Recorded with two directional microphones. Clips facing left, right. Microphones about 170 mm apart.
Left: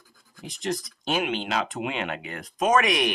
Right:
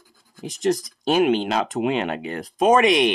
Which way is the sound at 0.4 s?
40° right (ahead or behind).